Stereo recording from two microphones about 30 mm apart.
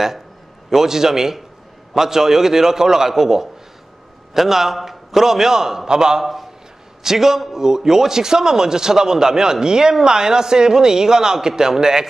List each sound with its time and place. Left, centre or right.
0.7 s a man's voice: centre